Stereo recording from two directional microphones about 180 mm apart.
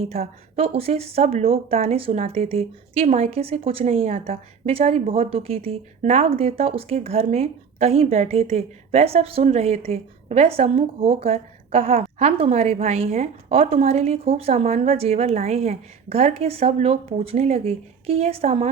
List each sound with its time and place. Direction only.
0.0 s a woman's voice: 35° right (ahead or behind)